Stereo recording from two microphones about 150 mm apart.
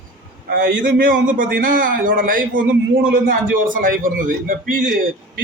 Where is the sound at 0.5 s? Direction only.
65° right (ahead or behind).